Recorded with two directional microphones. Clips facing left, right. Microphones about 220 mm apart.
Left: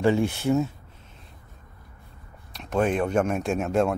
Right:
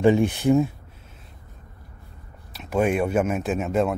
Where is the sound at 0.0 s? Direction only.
15° right (ahead or behind).